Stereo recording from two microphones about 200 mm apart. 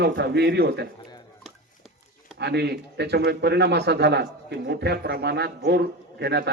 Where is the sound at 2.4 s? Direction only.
55° right (ahead or behind).